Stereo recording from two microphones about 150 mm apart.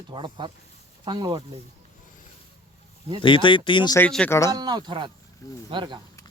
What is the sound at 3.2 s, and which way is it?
Speech, 35° left (ahead or behind).